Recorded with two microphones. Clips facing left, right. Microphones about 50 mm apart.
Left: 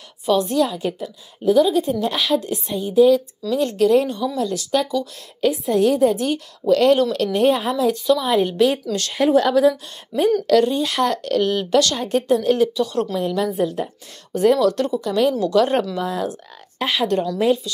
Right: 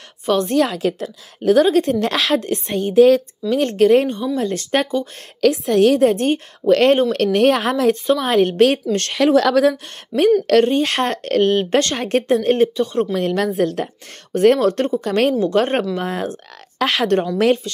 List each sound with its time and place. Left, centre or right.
0.3 s speech: right
0.7 s a woman's voice: right
2.4 s speech: right
5.4 s a woman's voice: right
6.2 s speech: right
7.3 s a woman's voice: right
9.1 s a woman's voice: right
10.4 s speech: right
12.4 s speech: right
13.1 s a woman's voice: right
14.6 s speech: right
15.0 s a woman's voice: right
15.5 s speech: right
16.7 s a woman's voice: right